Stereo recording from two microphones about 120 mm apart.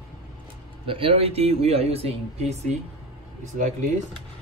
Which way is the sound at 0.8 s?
50° right (ahead or behind).